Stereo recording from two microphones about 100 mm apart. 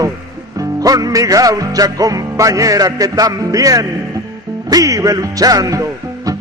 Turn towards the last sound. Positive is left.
turn(degrees=-35)  # may be behind; listen again after turning